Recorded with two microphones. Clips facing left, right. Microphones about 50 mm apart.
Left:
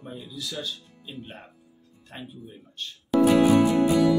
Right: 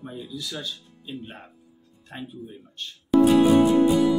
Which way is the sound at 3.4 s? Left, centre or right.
Left.